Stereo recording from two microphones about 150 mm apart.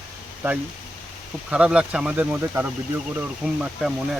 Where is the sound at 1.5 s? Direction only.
5° right (ahead or behind).